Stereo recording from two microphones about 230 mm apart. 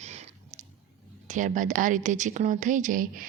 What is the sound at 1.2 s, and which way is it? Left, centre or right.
Speech, right.